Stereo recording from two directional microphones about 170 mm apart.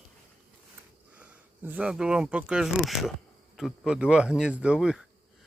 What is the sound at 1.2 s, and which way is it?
Speech, 10° right (ahead or behind).